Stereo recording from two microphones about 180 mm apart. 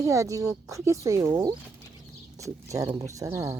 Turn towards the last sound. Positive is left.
turn(degrees=-15)  # may be behind; listen again after turning